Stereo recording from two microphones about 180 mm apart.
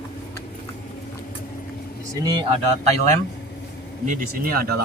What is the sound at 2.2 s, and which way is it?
Speech, 25° right (ahead or behind).